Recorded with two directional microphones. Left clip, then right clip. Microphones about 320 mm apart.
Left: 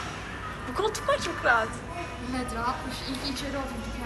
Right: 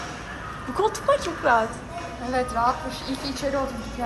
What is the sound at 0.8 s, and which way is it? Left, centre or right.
A woman's voice, centre.